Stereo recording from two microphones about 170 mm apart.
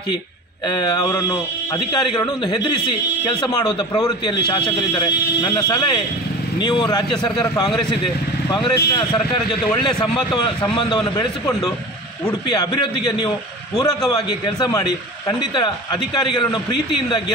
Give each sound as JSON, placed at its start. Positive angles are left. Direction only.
{"t": 0.7, "sound": "a man's voice", "side_deg": 25}
{"t": 10.3, "sound": "a man's voice", "side_deg": 30}
{"t": 12.3, "sound": "a man's voice", "side_deg": 25}